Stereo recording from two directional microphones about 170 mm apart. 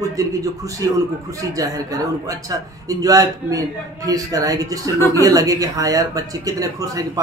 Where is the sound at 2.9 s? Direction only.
20° right (ahead or behind).